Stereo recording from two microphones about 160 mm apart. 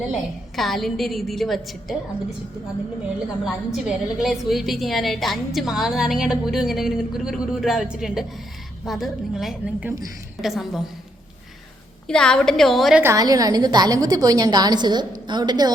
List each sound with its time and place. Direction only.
0.1 s a woman's voice: centre (ahead or behind)
3.4 s a woman's voice: centre (ahead or behind)
12.0 s a woman's voice: 5° left (ahead or behind)
13.0 s a woman's voice: 20° right (ahead or behind)